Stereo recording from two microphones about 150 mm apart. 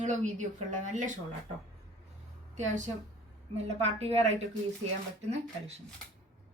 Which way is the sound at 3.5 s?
45° right (ahead or behind).